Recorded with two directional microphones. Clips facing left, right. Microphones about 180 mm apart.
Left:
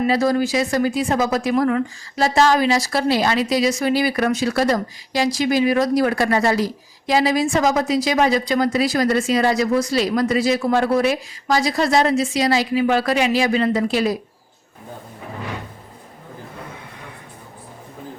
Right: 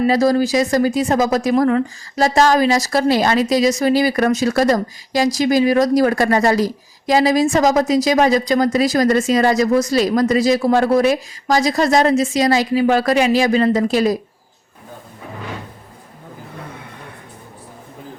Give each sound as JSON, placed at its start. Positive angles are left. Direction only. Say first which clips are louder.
{"t": 0.0, "sound": "a woman's voice", "louder": "right 3 dB", "side_deg": -35}